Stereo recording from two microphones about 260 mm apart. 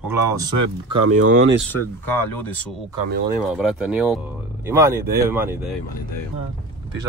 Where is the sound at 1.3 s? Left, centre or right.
Right.